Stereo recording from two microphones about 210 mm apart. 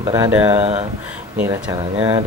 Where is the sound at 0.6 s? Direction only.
30° right (ahead or behind).